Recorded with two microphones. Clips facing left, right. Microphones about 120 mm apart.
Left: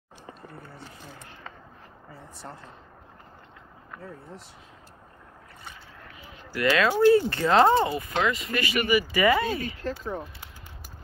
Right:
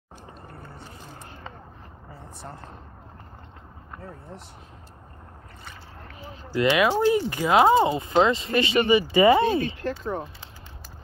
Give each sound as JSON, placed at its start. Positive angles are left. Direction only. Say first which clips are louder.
{"t": 6.5, "sound": "speech", "louder": "right 2 dB", "side_deg": -20}
{"t": 7.8, "sound": "speech", "louder": "right 5 dB", "side_deg": -25}